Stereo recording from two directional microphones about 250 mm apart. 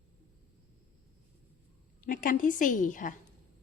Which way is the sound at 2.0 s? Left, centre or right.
Left.